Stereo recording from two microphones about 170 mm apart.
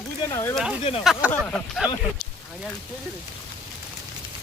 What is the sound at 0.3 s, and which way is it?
Speech, 15° left (ahead or behind).